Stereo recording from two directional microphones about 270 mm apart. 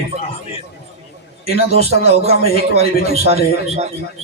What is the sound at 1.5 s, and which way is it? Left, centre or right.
A man's voice, right.